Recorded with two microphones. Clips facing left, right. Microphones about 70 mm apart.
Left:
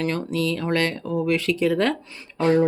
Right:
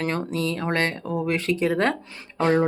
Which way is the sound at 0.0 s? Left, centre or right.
Right.